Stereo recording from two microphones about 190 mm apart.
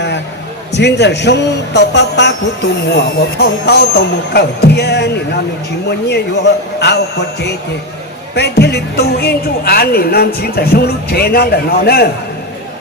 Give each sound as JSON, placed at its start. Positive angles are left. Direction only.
{"t": 0.7, "sound": "speech", "side_deg": 60}